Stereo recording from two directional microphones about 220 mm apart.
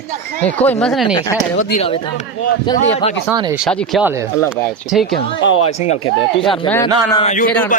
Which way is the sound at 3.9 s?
5° right (ahead or behind).